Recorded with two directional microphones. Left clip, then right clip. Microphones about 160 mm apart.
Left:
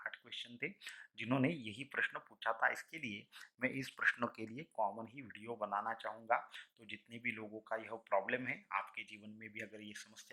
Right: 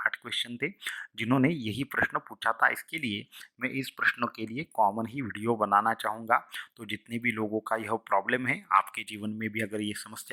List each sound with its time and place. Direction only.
0.0 s speech: 30° right (ahead or behind); by 4.6 s 5° right (ahead or behind)
4.8 s speech: 25° right (ahead or behind)